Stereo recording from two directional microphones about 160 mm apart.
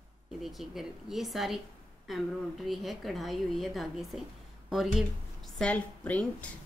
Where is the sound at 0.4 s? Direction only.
Centre (ahead or behind).